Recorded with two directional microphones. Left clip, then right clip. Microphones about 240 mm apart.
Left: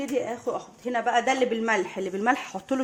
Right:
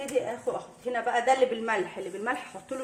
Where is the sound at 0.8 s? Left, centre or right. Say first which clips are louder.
Left 2 dB; left.